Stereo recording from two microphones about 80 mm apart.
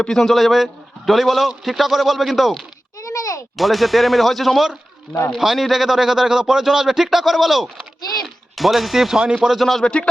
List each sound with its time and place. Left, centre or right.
0.0 s a man's voice: centre
3.0 s a sound: left
3.6 s a man's voice: centre